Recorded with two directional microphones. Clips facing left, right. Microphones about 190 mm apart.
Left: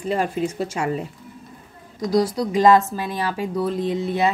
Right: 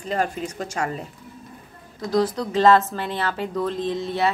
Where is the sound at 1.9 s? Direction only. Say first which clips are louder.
Left 2 dB; 10° left (ahead or behind).